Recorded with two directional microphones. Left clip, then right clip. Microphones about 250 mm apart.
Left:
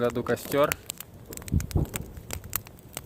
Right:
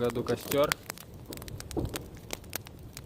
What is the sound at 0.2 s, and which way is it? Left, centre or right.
Speech, left.